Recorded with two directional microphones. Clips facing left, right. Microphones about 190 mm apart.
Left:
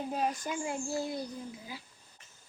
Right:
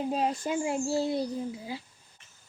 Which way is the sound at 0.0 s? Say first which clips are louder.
Right 4 dB; 20° right (ahead or behind).